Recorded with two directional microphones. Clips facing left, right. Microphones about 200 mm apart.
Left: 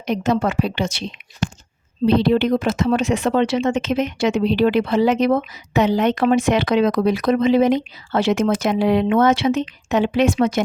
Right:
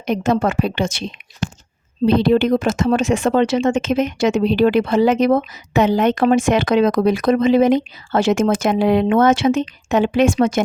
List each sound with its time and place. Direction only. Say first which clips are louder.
0.0 s speech: right 2 dB; 50° right (ahead or behind)
2.0 s speech: right 2 dB; 50° right (ahead or behind)